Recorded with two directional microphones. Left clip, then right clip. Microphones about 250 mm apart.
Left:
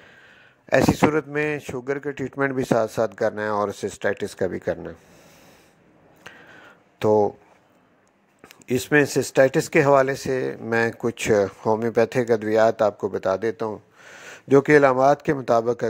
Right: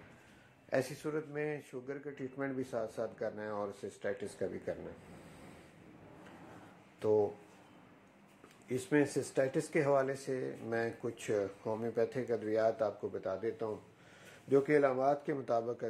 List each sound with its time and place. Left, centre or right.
0.7 s speech: left
7.0 s speech: left
8.5 s speech: left